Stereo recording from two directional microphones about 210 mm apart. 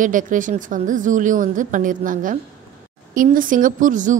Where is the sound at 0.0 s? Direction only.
40° right (ahead or behind).